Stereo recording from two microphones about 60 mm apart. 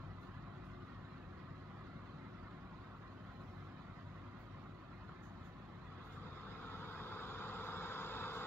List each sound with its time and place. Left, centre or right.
6.7 s vehicle: left